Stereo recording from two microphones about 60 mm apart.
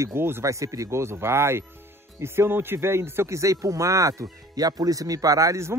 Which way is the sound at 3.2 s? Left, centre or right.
Right.